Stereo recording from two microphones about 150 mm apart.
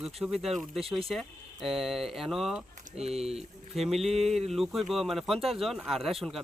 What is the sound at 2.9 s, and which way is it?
Speech, 45° right (ahead or behind).